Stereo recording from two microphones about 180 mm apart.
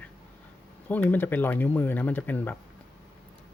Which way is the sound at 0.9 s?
10° left (ahead or behind).